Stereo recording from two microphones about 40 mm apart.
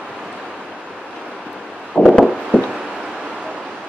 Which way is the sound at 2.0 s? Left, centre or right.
Centre.